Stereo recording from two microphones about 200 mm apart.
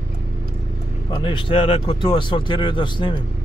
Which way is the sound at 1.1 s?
25° left (ahead or behind).